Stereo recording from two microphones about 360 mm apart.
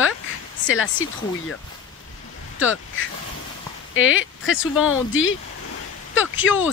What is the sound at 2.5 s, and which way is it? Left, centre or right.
Speech, left.